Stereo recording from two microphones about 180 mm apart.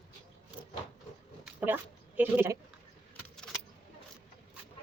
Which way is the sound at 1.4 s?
10° right (ahead or behind).